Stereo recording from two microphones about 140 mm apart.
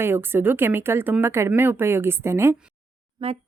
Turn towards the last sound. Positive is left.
turn(degrees=-45)  # may be behind; listen again after turning